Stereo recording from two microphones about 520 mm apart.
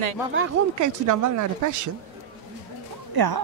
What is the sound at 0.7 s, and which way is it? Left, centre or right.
Speech, right.